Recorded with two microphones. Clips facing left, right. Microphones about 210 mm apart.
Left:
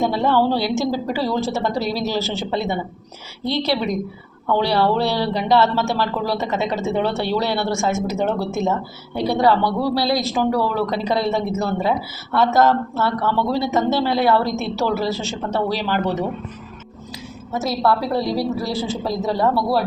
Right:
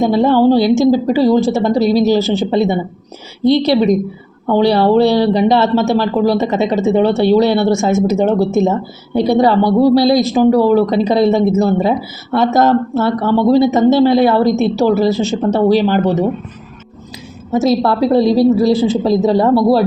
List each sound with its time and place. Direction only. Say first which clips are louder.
0.0 s a woman's voice: right 7 dB; 15° right (ahead or behind)
17.5 s speech: right 7 dB; 20° right (ahead or behind)